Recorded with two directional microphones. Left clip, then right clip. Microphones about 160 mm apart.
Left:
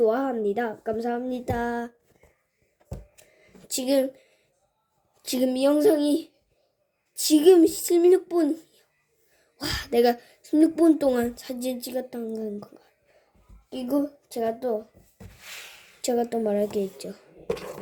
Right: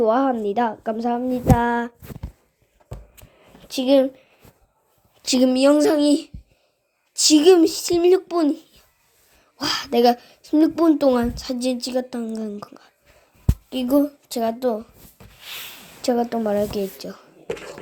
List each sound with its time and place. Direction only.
0.0 s a woman's voice: 5° right (ahead or behind)
3.7 s a woman's voice: 5° right (ahead or behind)
5.2 s a woman's voice: 15° right (ahead or behind)
16.0 s a woman's voice: 10° right (ahead or behind)
17.0 s a sound: 5° right (ahead or behind)